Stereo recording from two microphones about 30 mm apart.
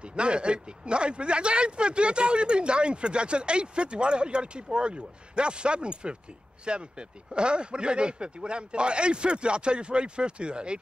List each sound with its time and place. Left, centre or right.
0.0 s speech: right